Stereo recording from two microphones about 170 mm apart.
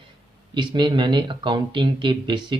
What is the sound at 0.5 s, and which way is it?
Speech, 25° right (ahead or behind).